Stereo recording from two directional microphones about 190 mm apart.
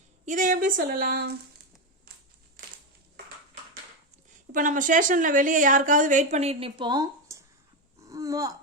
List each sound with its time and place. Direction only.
0.3 s a woman's voice: 45° right (ahead or behind)
4.5 s a woman's voice: 45° right (ahead or behind); by 7.4 s 20° right (ahead or behind)
8.0 s a sound: 20° right (ahead or behind)